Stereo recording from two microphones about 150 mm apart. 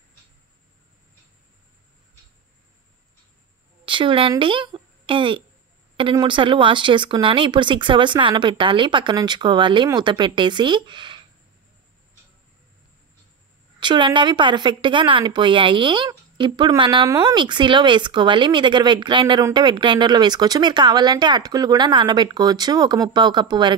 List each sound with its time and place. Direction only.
3.8 s speech: 35° right (ahead or behind)
13.7 s speech: 30° right (ahead or behind)